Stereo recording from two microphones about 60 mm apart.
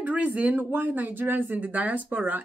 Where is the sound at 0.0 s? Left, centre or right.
Right.